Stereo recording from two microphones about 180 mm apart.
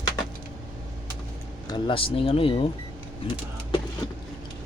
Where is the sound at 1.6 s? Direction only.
25° left (ahead or behind).